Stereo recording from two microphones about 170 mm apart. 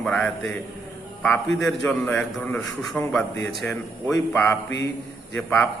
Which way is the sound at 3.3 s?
90° left.